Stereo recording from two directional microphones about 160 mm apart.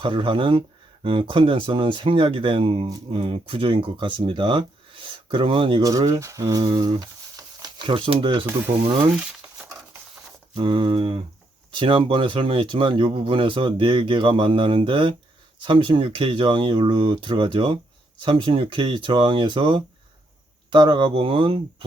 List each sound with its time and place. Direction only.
0.0 s speech: 30° right (ahead or behind)
9.1 s a sound: 5° right (ahead or behind)
10.5 s speech: 35° right (ahead or behind)